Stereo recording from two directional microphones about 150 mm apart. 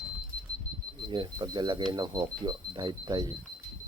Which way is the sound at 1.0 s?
30° right (ahead or behind).